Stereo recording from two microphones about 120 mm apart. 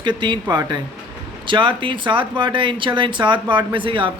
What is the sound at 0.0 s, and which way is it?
Speech, 40° right (ahead or behind).